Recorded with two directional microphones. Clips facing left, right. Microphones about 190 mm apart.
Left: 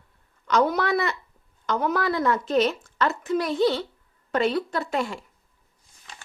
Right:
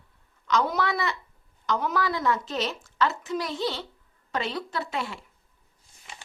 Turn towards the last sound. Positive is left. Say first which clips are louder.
# left 5 dB
turn(degrees=45)  # may be behind; listen again after turning